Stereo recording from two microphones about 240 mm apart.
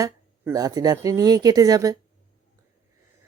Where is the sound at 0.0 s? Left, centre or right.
Centre.